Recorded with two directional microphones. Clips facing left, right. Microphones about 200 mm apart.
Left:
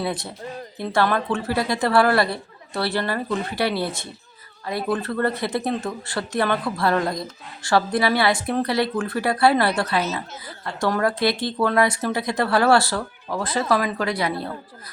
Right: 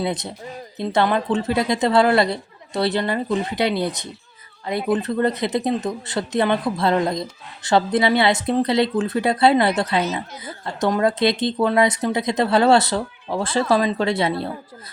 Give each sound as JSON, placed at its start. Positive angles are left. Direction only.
{"t": 0.0, "sound": "speech", "side_deg": -20}